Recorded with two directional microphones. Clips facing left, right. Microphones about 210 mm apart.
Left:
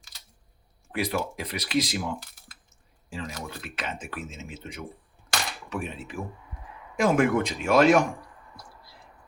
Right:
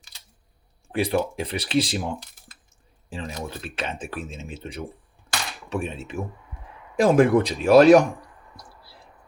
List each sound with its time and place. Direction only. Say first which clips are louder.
0.9 s speech: right 5 dB; 30° right (ahead or behind)
8.9 s whispering: right 2 dB; 35° right (ahead or behind)